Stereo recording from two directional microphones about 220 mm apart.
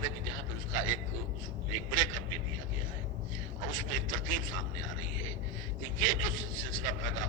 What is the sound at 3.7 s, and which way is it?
Speech, 65° right (ahead or behind).